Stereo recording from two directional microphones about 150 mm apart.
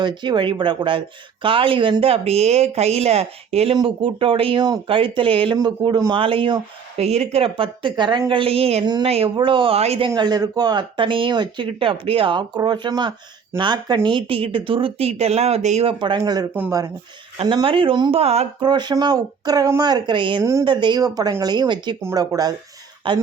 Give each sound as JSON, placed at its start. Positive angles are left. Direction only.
{"t": 0.0, "sound": "speech", "side_deg": -30}
{"t": 8.8, "sound": "speech", "side_deg": -30}
{"t": 9.0, "sound": "speech", "side_deg": -40}
{"t": 10.1, "sound": "speech", "side_deg": -25}
{"t": 18.6, "sound": "speech", "side_deg": -30}
{"t": 20.4, "sound": "speech", "side_deg": -20}
{"t": 20.7, "sound": "speech", "side_deg": -30}